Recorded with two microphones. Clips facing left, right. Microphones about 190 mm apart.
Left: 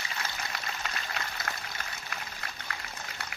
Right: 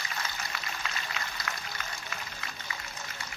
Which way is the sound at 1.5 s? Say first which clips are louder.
Right 1 dB; 45° left (ahead or behind).